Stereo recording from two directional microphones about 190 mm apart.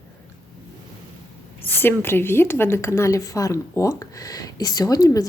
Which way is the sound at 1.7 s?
10° left (ahead or behind).